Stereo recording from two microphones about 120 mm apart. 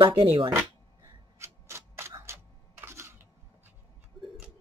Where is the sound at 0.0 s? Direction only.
45° right (ahead or behind).